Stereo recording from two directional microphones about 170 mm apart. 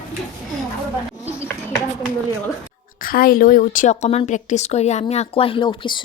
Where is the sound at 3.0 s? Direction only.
55° left (ahead or behind).